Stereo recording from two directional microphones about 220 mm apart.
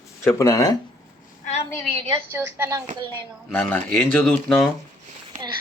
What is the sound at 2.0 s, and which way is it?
A woman's voice, 10° right (ahead or behind).